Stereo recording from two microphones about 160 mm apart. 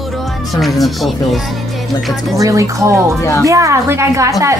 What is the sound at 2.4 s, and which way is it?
A woman's voice, 20° right (ahead or behind).